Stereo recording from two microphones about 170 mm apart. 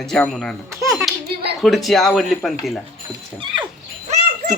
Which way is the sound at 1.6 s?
Centre (ahead or behind).